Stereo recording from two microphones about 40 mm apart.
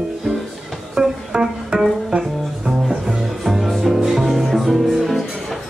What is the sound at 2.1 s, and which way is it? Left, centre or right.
Music, centre.